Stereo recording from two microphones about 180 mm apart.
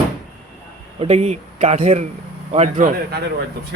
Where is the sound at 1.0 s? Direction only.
35° right (ahead or behind).